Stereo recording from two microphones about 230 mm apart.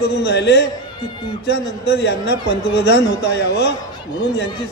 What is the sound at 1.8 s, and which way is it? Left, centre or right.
A man's voice, left.